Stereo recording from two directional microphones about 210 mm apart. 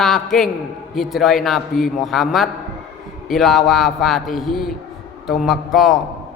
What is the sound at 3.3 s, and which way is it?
A man's voice, centre (ahead or behind).